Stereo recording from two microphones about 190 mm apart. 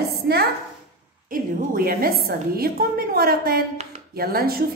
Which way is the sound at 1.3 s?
50° right (ahead or behind).